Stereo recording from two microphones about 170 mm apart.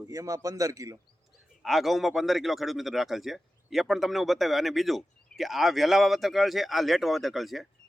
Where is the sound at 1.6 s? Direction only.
Centre (ahead or behind).